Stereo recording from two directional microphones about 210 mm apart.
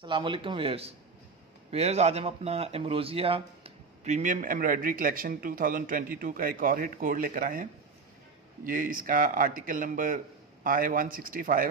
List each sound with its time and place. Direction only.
0.0 s a man's voice: 25° right (ahead or behind); by 7.6 s 40° right (ahead or behind)
8.6 s speech: 40° right (ahead or behind)